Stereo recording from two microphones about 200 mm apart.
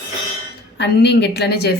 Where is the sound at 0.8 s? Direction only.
60° left (ahead or behind).